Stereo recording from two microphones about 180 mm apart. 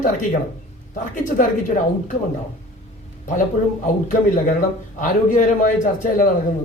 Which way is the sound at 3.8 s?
45° left (ahead or behind).